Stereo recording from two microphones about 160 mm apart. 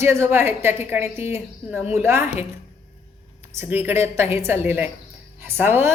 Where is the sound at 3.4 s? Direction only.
15° right (ahead or behind).